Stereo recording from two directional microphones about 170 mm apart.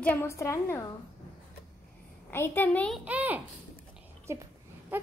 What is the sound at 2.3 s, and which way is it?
Speech, 15° left (ahead or behind).